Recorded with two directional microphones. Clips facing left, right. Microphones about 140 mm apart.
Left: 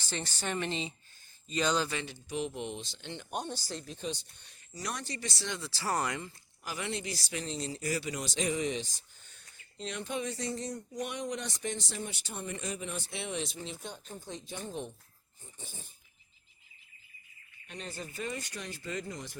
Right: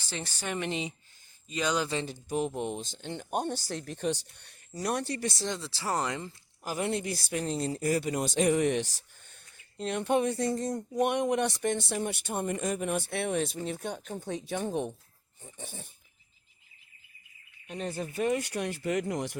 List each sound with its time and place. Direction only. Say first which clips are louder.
0.0 s speech: even; 10° right (ahead or behind)
1.9 s speech: right 5 dB; 30° right (ahead or behind)
2.1 s speech: right 5 dB; 45° right (ahead or behind)
5.5 s speech: left 2 dB; 25° right (ahead or behind)
6.7 s speech: right 6 dB; 45° right (ahead or behind); by 9.0 s 70° right (ahead or behind)
9.7 s speech: right 9 dB; 55° right (ahead or behind)
17.7 s speech: right 8 dB; 50° right (ahead or behind); by 19.4 s 70° right (ahead or behind)